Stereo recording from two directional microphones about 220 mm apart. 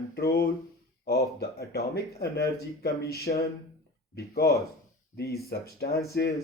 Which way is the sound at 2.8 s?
45° left (ahead or behind).